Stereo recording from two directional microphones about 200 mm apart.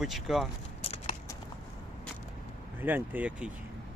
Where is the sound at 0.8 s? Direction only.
30° left (ahead or behind).